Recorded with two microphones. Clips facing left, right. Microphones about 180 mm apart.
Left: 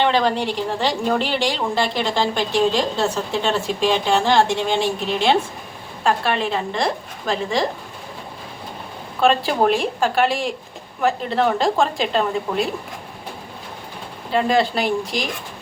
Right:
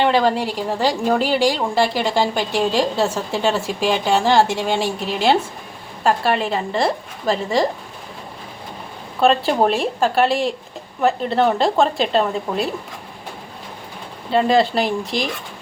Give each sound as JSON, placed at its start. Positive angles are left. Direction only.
{"t": 0.0, "sound": "a woman's voice", "side_deg": -5}
{"t": 9.2, "sound": "a woman's voice", "side_deg": 0}
{"t": 14.3, "sound": "a woman's voice", "side_deg": 0}